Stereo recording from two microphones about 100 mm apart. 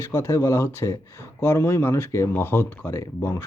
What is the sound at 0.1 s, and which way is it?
Speech, 30° left (ahead or behind).